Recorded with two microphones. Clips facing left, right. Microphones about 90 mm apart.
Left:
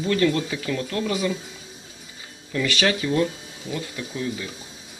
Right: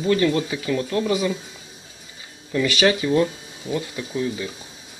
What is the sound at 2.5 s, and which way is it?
Speech, 10° right (ahead or behind).